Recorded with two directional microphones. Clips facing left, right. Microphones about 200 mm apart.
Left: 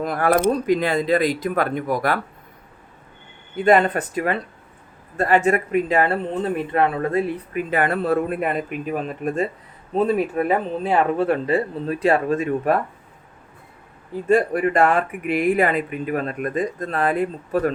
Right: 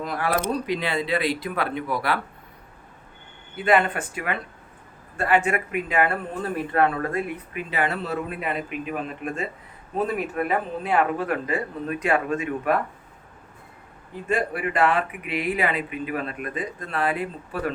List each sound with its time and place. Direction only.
0.0 s speech: 50° left (ahead or behind)
3.6 s speech: 40° left (ahead or behind)
6.2 s speech: 20° left (ahead or behind)
7.5 s speech: 50° left (ahead or behind)
9.9 s speech: 25° left (ahead or behind)
14.3 s speech: 40° left (ahead or behind)